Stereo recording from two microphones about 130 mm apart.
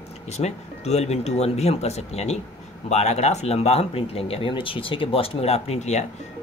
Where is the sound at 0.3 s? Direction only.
60° left (ahead or behind).